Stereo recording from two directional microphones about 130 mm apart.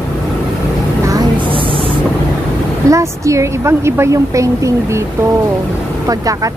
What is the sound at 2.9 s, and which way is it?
A woman's voice, 25° right (ahead or behind).